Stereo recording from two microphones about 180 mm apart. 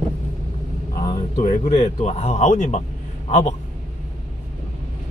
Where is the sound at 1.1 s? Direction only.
45° left (ahead or behind).